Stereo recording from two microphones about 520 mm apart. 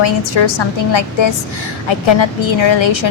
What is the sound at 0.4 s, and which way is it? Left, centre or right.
Speech, left.